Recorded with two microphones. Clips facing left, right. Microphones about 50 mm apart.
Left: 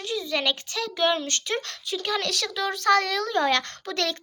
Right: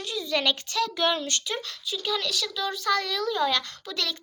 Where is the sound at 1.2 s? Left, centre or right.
Left.